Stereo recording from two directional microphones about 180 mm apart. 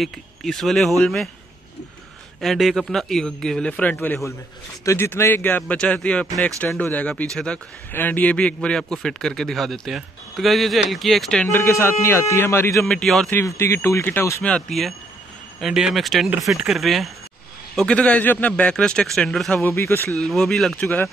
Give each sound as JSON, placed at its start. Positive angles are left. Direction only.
{"t": 0.0, "sound": "a man's voice", "side_deg": 0}
{"t": 2.4, "sound": "a man's voice", "side_deg": 0}
{"t": 12.8, "sound": "a man's voice", "side_deg": 5}
{"t": 13.4, "sound": "a man's voice", "side_deg": 15}
{"t": 14.4, "sound": "a man's voice", "side_deg": 5}
{"t": 19.6, "sound": "a man's voice", "side_deg": 15}